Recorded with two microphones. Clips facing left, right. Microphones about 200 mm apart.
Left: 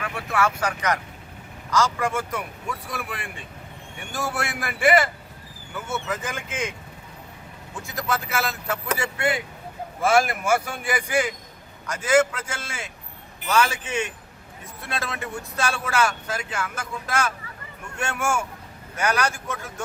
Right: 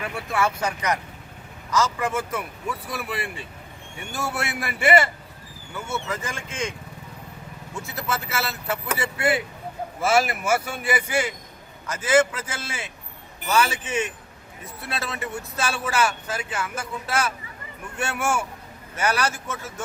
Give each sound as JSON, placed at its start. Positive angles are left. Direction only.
{"t": 1.7, "sound": "speech", "side_deg": -5}
{"t": 7.8, "sound": "a man's voice", "side_deg": -5}